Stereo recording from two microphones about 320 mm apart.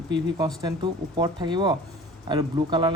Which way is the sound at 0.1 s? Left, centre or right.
Centre.